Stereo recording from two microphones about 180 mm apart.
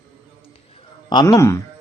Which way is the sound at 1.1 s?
25° left (ahead or behind).